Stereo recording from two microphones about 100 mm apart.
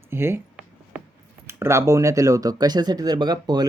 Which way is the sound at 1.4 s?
25° right (ahead or behind).